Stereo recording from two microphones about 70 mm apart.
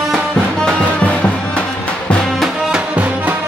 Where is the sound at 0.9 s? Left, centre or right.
Centre.